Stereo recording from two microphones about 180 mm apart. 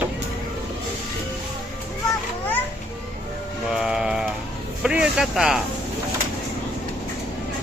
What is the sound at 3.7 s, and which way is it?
Music, 5° right (ahead or behind).